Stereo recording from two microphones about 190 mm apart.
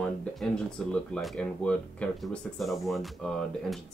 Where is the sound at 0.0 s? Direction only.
5° left (ahead or behind).